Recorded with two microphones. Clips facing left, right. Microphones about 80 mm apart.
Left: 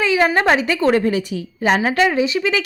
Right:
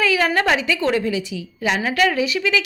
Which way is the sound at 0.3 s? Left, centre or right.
Left.